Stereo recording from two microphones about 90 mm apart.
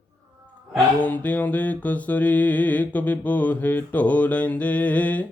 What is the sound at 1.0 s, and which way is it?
Mantra, 15° left (ahead or behind).